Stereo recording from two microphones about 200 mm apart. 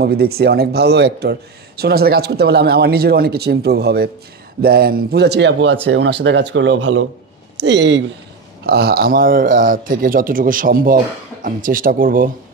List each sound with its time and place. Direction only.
0.0 s a man's voice: 50° right (ahead or behind); by 7.1 s 75° right (ahead or behind)
7.5 s speech: 60° right (ahead or behind)
8.6 s a man's voice: 50° right (ahead or behind)